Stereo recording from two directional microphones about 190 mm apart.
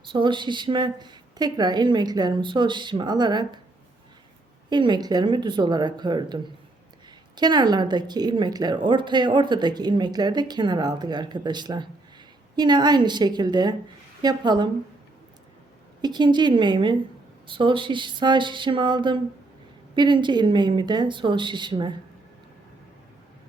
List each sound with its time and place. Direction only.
0.1 s a woman's voice: 25° right (ahead or behind)
4.7 s a woman's voice: 25° right (ahead or behind)
16.0 s a woman's voice: 20° right (ahead or behind)